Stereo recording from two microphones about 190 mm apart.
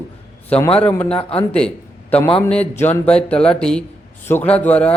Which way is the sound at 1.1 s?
30° left (ahead or behind).